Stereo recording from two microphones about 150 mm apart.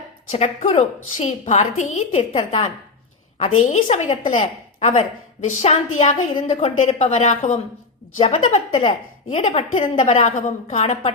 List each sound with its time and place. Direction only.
0.3 s a woman's voice: 45° left (ahead or behind)
2.3 s a woman's voice: 35° left (ahead or behind)
3.3 s a woman's voice: 50° left (ahead or behind)
3.8 s a woman's voice: 40° left (ahead or behind)